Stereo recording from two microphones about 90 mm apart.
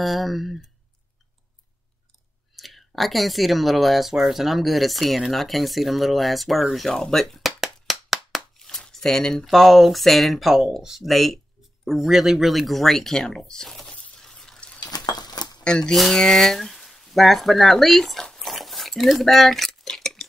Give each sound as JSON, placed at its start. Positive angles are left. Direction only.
{"t": 0.0, "sound": "speech", "side_deg": 0}
{"t": 2.5, "sound": "speech", "side_deg": 0}
{"t": 14.8, "sound": "a sound", "side_deg": 50}
{"t": 15.6, "sound": "speech", "side_deg": 10}